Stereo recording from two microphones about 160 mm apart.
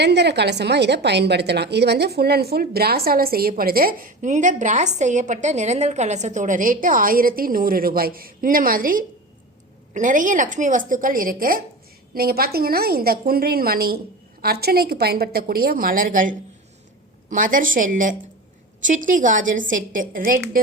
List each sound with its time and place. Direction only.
0.0 s a woman's voice: 90° right; by 20.4 s 60° right (ahead or behind)